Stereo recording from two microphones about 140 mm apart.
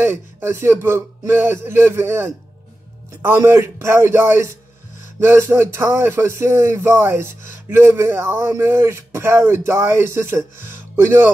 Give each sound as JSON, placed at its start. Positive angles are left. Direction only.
{"t": 0.0, "sound": "speech", "side_deg": -15}